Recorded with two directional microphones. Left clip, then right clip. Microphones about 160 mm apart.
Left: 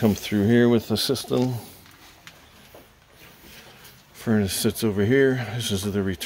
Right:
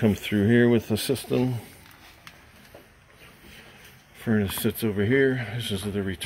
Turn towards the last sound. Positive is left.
turn(degrees=20)  # may be behind; listen again after turning